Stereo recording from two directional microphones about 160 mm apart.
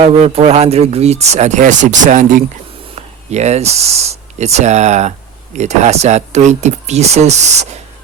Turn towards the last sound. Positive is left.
turn(degrees=-45)  # may be behind; listen again after turning